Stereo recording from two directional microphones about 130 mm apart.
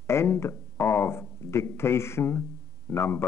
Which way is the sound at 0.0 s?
20° left (ahead or behind).